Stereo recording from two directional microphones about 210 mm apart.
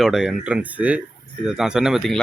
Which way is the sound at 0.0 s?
Centre (ahead or behind).